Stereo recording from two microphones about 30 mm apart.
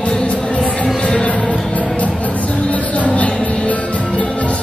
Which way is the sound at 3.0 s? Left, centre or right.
Left.